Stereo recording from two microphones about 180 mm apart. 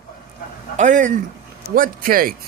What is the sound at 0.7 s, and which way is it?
Speech, 45° right (ahead or behind).